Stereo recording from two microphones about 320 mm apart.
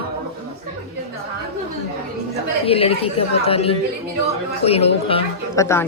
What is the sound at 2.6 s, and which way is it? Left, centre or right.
Speech, centre.